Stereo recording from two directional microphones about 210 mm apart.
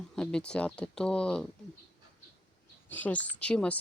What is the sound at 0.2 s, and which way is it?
Speech, 5° left (ahead or behind).